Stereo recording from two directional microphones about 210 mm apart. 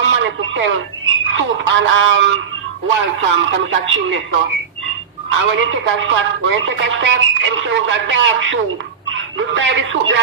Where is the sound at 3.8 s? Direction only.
65° right (ahead or behind).